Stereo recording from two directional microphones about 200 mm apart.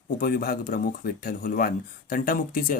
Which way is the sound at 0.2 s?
45° left (ahead or behind).